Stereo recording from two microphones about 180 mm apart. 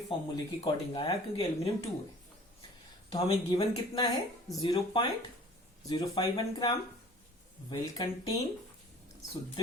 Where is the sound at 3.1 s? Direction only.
30° left (ahead or behind).